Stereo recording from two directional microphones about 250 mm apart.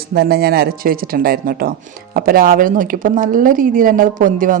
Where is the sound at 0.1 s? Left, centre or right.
Right.